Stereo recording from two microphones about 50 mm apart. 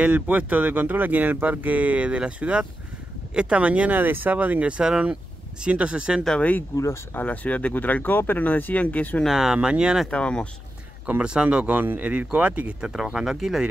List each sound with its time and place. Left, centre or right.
0.0 s speech: right
4.0 s speech: right; by 6.2 s centre
7.2 s speech: left
9.3 s speech: centre
10.1 s speech: left
11.1 s speech: right
12.8 s speech: centre